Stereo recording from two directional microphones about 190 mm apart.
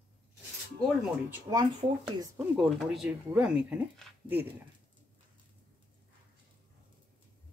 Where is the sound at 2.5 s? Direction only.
Centre (ahead or behind).